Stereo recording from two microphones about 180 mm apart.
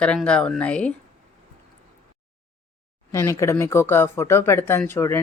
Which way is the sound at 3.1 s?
15° left (ahead or behind).